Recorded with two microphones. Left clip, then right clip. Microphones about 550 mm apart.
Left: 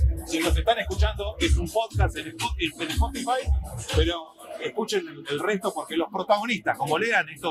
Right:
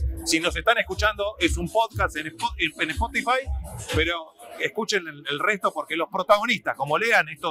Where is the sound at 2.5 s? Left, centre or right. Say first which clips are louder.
Right 4 dB; right.